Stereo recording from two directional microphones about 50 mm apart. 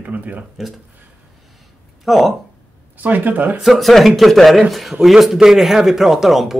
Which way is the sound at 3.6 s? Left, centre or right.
Centre.